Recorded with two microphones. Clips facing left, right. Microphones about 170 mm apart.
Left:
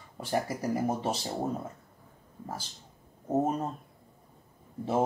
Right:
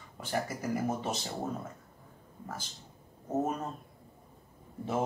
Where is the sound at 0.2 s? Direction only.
35° left (ahead or behind).